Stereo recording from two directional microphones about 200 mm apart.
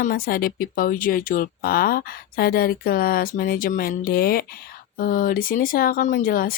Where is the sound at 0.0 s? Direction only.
45° left (ahead or behind).